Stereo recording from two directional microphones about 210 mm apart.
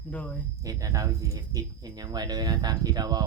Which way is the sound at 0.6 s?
15° right (ahead or behind).